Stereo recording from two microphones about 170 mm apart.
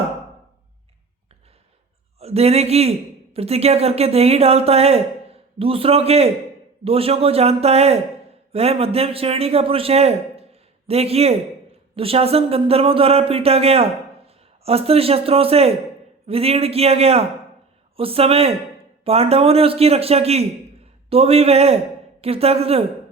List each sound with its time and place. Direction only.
2.1 s a man's voice: 35° right (ahead or behind)